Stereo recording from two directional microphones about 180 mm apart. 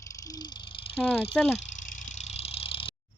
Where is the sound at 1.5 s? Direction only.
45° left (ahead or behind).